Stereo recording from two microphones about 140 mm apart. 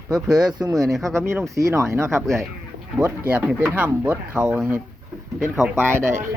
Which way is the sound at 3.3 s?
5° right (ahead or behind).